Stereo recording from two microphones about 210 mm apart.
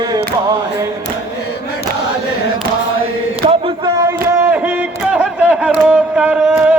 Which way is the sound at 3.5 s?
25° right (ahead or behind).